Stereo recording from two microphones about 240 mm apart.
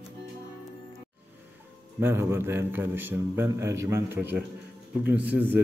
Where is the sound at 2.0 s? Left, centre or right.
Centre.